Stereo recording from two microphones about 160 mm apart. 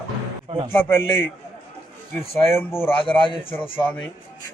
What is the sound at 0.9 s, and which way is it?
Speech, 15° left (ahead or behind).